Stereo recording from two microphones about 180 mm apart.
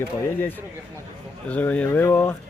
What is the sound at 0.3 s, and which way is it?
Speech, 10° left (ahead or behind).